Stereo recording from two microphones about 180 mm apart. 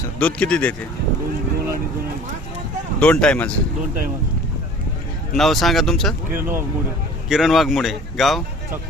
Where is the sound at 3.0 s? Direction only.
5° left (ahead or behind).